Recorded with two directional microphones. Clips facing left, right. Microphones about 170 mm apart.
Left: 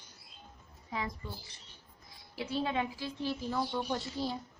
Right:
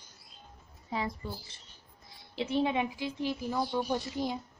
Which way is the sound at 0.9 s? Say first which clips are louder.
Right 4 dB; 30° right (ahead or behind).